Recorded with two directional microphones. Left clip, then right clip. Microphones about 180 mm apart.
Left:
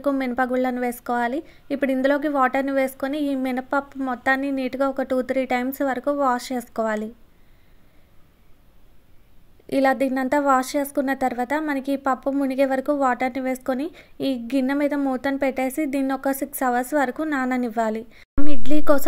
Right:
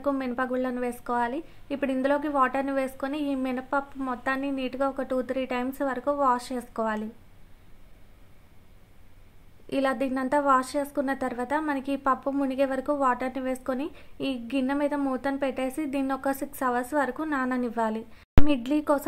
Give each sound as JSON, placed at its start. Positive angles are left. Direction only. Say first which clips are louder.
{"t": 0.0, "sound": "a woman's voice", "louder": "left 5 dB", "side_deg": 30}
{"t": 9.7, "sound": "a woman's voice", "louder": "left 7 dB", "side_deg": 25}